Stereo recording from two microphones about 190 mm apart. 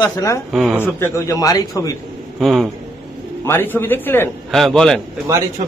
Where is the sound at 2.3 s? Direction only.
Centre (ahead or behind).